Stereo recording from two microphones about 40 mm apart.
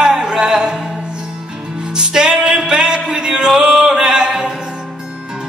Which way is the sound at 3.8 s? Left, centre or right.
Centre.